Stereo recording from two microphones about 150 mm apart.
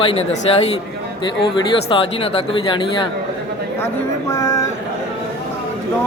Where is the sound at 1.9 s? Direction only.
40° left (ahead or behind).